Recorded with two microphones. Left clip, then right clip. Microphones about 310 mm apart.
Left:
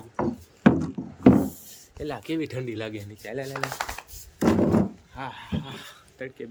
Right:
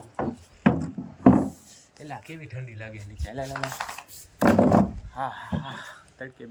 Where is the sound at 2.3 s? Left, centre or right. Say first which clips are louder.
Left 12 dB; left.